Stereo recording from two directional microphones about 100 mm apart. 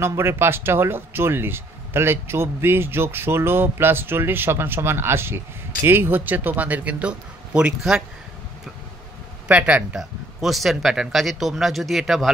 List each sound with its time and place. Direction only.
0.0 s a man's voice: 25° right (ahead or behind); by 8.0 s 10° right (ahead or behind)
9.5 s speech: 15° right (ahead or behind)